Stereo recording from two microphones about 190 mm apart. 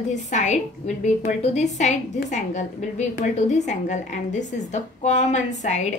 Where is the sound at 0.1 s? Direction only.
40° left (ahead or behind).